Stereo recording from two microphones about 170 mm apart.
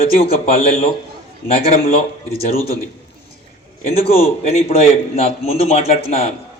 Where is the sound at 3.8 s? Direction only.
35° left (ahead or behind).